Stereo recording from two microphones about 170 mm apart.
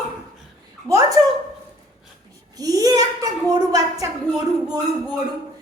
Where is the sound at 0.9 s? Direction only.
20° right (ahead or behind).